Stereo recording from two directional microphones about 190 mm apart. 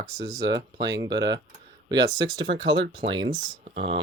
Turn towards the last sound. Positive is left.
turn(degrees=-30)  # may be behind; listen again after turning